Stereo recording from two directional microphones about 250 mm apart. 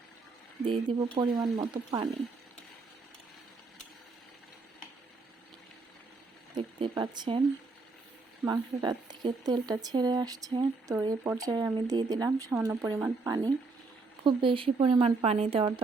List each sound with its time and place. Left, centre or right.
0.6 s speech: centre
6.5 s a sound: right
6.9 s speech: centre
8.4 s speech: centre